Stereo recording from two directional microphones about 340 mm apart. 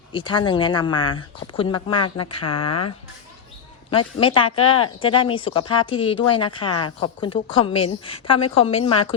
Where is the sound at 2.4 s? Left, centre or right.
Left.